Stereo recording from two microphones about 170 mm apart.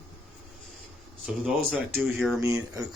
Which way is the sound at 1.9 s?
Centre (ahead or behind).